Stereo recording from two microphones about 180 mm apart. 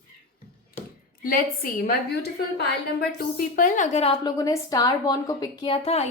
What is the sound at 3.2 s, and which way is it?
Speech, 50° left (ahead or behind).